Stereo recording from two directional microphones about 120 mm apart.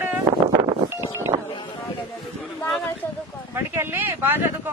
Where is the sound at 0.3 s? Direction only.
35° right (ahead or behind).